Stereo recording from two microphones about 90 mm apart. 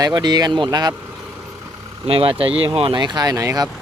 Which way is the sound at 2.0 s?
90° right.